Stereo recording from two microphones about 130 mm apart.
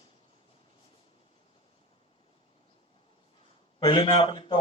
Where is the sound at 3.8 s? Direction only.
40° left (ahead or behind).